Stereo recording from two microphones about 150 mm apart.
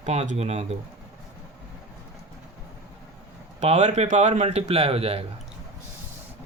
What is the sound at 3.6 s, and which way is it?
Speech, 50° right (ahead or behind).